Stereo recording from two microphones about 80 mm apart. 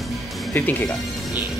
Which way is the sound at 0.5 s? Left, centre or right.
Left.